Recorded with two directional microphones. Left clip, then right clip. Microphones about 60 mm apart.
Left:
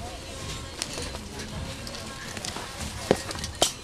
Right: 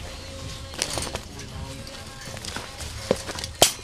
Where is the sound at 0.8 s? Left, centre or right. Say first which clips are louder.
Right 7 dB; right.